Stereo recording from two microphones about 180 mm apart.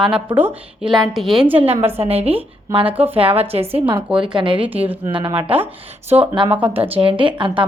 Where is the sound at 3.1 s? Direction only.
30° right (ahead or behind).